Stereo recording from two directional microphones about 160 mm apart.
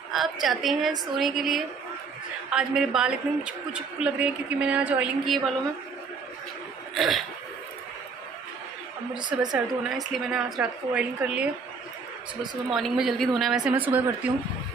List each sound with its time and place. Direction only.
0.1 s a woman's voice: centre (ahead or behind)
7.0 s a woman's voice: centre (ahead or behind)
9.1 s a woman's voice: 25° right (ahead or behind)
10.1 s a woman's voice: centre (ahead or behind)
12.6 s a woman's voice: centre (ahead or behind)